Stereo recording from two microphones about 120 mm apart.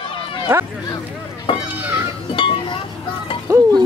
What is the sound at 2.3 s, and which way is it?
Chink, 45° left (ahead or behind).